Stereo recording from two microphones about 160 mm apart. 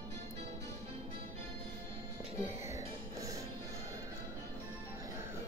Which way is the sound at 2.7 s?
20° right (ahead or behind).